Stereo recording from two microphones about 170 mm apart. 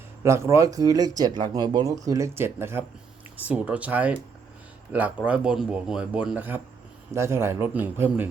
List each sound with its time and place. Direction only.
0.2 s a man's voice: 15° right (ahead or behind)